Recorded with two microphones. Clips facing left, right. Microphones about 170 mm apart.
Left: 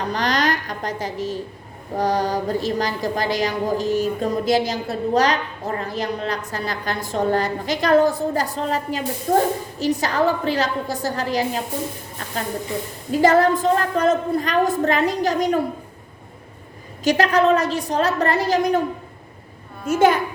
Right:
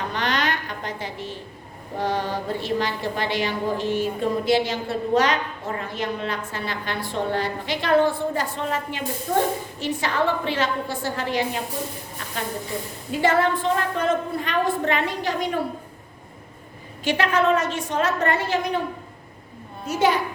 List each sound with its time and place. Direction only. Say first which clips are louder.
0.1 s a sound: left 5 dB; 40° left (ahead or behind)
2.0 s a woman's voice: left 5 dB; 40° left (ahead or behind)
13.1 s a woman's voice: left 5 dB; 40° left (ahead or behind)
17.0 s a woman's voice: left 4 dB; 40° left (ahead or behind)
19.9 s a child's voice: left 5 dB; 50° left (ahead or behind)